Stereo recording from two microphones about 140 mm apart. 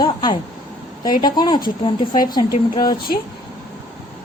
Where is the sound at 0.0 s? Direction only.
35° left (ahead or behind).